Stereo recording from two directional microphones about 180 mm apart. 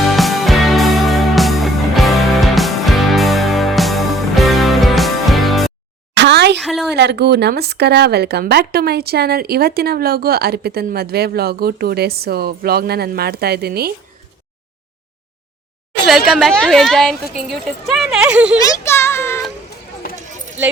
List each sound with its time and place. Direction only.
0.1 s music: centre (ahead or behind)
6.1 s a sound: 70° right (ahead or behind)
6.6 s speech: centre (ahead or behind)
6.9 s speech: 65° right (ahead or behind)
16.0 s a woman's voice: centre (ahead or behind)
18.5 s speech: 15° left (ahead or behind)